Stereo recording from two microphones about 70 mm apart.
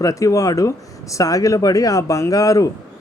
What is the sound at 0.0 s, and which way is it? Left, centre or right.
A man's voice, left.